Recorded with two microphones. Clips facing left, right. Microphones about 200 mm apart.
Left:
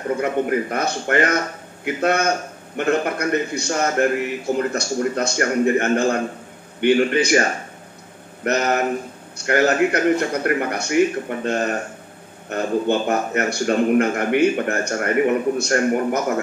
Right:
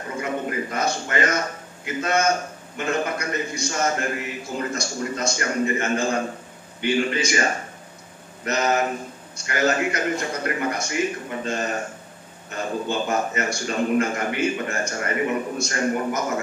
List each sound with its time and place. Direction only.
0.2 s a man's voice: 60° left (ahead or behind)
8.5 s a man's voice: 60° left (ahead or behind)